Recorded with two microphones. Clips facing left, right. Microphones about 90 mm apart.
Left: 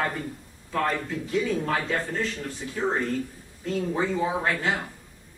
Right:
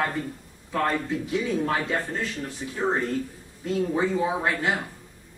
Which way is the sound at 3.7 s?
15° right (ahead or behind).